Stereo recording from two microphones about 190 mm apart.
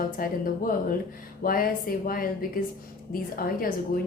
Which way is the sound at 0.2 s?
50° left (ahead or behind).